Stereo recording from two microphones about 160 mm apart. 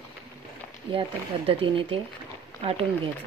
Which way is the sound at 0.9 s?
35° right (ahead or behind).